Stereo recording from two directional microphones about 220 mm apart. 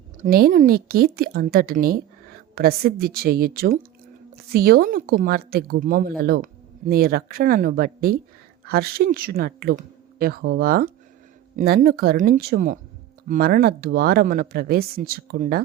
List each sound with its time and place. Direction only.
0.2 s speech: 45° right (ahead or behind)